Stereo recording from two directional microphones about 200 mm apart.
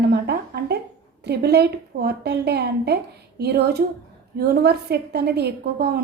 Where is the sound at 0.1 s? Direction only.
55° right (ahead or behind).